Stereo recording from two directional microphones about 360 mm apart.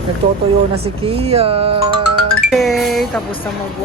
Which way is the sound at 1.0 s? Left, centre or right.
Centre.